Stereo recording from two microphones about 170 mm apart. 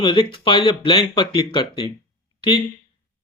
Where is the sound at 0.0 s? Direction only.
30° left (ahead or behind).